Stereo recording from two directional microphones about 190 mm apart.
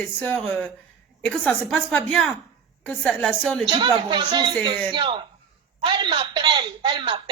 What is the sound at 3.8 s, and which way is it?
Speech, 25° right (ahead or behind).